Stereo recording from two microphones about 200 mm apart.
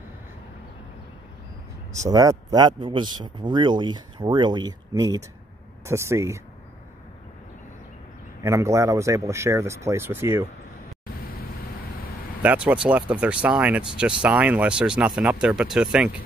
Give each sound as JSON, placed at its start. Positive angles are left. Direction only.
{"t": 2.0, "sound": "speech", "side_deg": -15}
{"t": 8.4, "sound": "speech", "side_deg": -15}
{"t": 12.4, "sound": "speech", "side_deg": -5}